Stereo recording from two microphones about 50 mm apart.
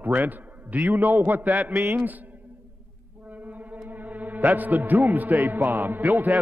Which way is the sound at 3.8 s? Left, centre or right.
Right.